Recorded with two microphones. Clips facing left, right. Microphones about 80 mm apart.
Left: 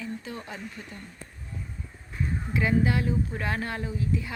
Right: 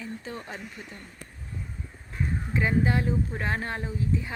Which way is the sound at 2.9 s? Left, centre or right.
Right.